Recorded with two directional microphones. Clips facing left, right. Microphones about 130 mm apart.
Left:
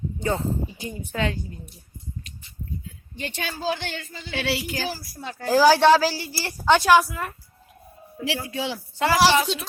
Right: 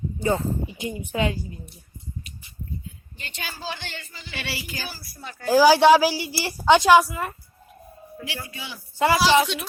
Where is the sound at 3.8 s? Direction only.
75° left (ahead or behind).